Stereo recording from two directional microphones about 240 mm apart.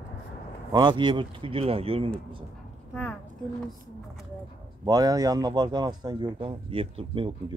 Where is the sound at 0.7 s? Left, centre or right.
Centre.